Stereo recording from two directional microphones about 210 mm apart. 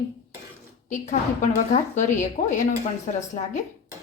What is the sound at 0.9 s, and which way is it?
A woman's voice, 35° left (ahead or behind).